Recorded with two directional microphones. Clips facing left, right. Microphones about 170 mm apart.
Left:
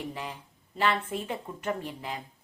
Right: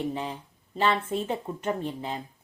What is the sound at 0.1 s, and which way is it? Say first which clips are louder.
A woman's voice: right 5 dB; 30° right (ahead or behind).